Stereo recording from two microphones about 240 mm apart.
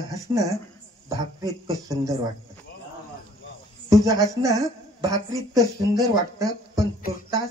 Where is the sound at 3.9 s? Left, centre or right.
Centre.